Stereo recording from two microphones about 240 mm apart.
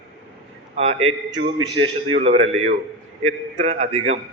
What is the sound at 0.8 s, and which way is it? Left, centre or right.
A man's voice, right.